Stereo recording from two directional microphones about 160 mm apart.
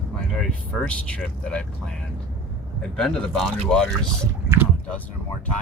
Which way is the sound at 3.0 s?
5° left (ahead or behind).